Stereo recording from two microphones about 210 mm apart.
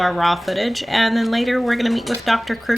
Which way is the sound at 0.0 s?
Centre (ahead or behind).